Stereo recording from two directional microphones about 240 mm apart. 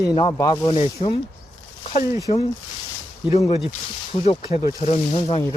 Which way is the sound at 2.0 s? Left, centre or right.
Centre.